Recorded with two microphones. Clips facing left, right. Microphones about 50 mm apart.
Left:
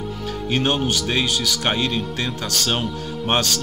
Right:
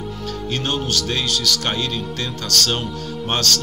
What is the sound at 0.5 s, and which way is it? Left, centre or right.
A man's voice, centre.